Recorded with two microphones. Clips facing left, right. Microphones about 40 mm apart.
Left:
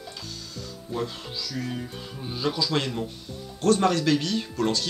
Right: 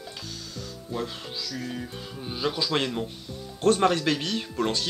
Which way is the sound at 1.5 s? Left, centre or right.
Centre.